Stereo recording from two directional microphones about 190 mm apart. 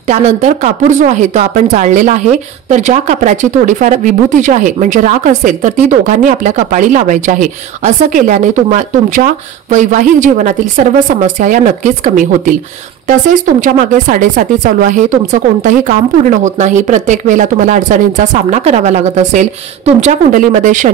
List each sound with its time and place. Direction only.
0.1 s speech: 40° right (ahead or behind)